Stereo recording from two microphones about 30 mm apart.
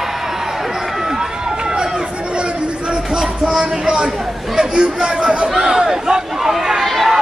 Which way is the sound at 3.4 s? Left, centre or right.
Right.